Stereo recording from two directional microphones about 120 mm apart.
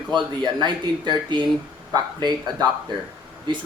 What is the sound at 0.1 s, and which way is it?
Speech, 40° right (ahead or behind).